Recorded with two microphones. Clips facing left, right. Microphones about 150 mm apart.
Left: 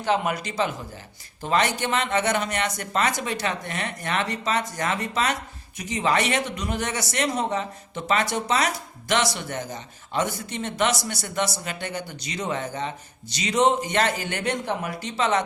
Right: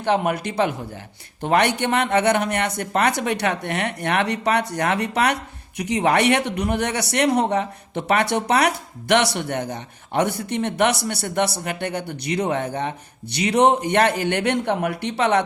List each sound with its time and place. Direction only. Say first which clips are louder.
0.0 s speech: right 3 dB; 55° right (ahead or behind)